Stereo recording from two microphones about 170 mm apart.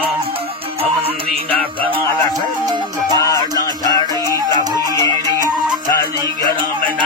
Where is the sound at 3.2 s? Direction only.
20° left (ahead or behind).